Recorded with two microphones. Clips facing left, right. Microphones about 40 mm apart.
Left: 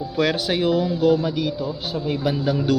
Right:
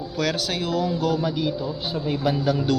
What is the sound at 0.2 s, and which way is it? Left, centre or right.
Speech, centre.